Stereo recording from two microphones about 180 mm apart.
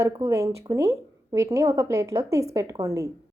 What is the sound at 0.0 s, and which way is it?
A woman's voice, 15° right (ahead or behind).